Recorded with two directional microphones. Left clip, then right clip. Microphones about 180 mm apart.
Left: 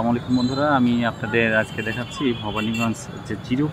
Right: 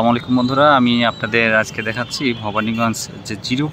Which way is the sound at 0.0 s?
15° right (ahead or behind).